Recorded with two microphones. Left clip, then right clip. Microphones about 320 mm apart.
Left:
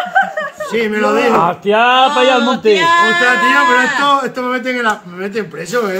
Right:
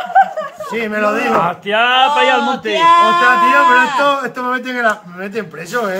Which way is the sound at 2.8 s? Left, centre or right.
Right.